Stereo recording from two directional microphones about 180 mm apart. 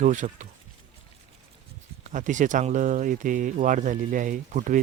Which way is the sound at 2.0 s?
45° right (ahead or behind).